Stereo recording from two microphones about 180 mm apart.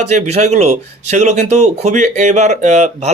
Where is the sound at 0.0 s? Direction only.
40° right (ahead or behind).